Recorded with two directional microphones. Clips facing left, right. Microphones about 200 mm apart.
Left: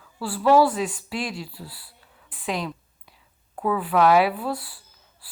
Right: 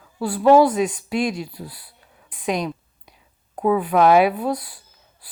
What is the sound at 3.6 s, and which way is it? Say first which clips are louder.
Speech: right 4 dB; 20° right (ahead or behind).